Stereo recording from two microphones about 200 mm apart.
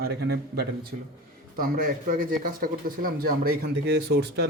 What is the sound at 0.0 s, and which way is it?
Speech, 55° right (ahead or behind).